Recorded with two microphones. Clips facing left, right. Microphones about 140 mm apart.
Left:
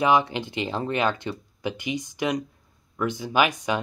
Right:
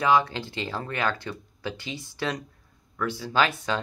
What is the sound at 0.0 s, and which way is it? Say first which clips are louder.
Speech: left 1 dB; 20° left (ahead or behind).